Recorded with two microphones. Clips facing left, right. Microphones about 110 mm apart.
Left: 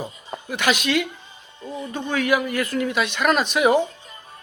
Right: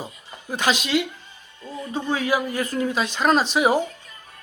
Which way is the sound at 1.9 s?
30° right (ahead or behind).